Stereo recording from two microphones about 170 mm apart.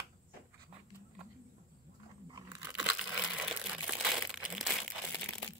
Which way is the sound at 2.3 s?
20° right (ahead or behind).